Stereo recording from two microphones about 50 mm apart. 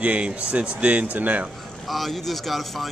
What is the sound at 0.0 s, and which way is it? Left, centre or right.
Speech, right.